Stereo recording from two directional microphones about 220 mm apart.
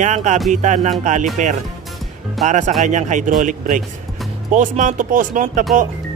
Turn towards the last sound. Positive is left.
turn(degrees=-35)  # may be behind; listen again after turning